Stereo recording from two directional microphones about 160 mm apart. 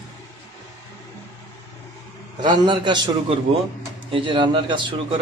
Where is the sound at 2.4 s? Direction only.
30° right (ahead or behind).